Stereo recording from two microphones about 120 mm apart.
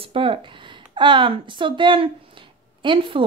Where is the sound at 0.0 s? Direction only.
50° right (ahead or behind).